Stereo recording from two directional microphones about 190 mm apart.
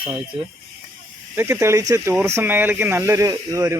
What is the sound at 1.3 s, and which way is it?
Speech, 15° right (ahead or behind).